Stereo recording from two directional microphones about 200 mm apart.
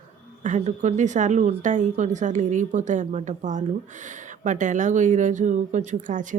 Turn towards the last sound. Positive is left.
turn(degrees=-40)  # may be behind; listen again after turning